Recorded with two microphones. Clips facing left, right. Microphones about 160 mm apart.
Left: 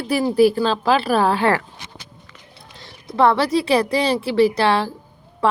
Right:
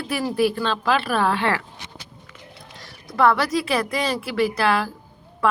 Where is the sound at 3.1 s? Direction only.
30° left (ahead or behind).